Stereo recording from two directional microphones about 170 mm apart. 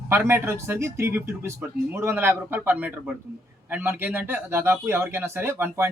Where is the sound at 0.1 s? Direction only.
15° right (ahead or behind).